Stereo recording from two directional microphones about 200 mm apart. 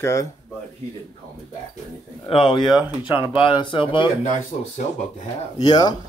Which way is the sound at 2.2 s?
25° left (ahead or behind).